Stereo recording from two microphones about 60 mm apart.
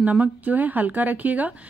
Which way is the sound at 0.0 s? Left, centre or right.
Right.